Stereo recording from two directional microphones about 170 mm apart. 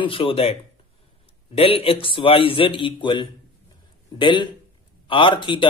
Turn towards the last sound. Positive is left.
turn(degrees=30)  # may be behind; listen again after turning